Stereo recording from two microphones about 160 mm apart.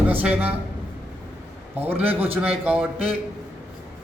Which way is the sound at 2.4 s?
10° right (ahead or behind).